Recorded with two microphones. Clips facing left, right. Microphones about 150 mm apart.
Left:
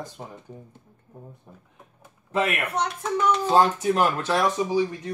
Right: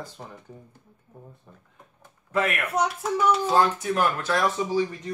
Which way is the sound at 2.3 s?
30° left (ahead or behind).